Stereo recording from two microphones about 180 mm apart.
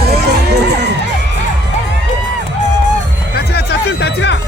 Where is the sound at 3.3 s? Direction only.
65° left (ahead or behind).